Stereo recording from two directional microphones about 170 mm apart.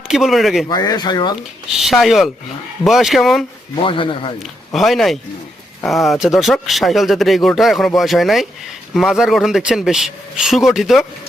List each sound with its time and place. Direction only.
0.1 s speech: centre (ahead or behind)
0.7 s speech: 25° left (ahead or behind)
1.7 s speech: centre (ahead or behind)
3.8 s speech: 30° left (ahead or behind)
4.7 s speech: centre (ahead or behind)